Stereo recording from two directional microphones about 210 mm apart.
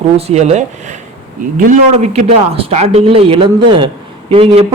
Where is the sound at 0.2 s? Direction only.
30° right (ahead or behind).